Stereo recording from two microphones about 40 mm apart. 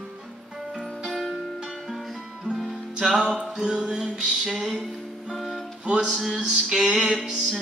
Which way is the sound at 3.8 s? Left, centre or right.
Centre.